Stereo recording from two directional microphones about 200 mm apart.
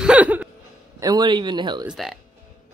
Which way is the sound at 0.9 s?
20° right (ahead or behind).